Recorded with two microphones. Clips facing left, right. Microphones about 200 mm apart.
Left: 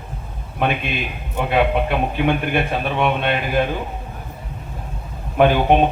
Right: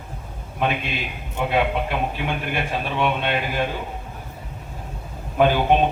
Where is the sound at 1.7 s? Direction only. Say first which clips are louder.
Left 4 dB; 55° left (ahead or behind).